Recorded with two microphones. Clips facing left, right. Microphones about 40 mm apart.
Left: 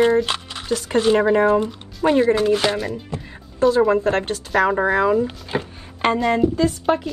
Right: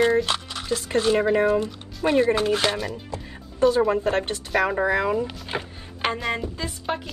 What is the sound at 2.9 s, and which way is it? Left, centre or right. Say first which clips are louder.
Speech: left 4 dB; left.